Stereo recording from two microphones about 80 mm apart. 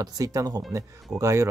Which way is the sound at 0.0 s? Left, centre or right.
Right.